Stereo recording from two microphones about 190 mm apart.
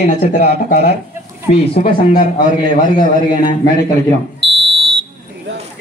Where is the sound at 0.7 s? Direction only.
50° left (ahead or behind).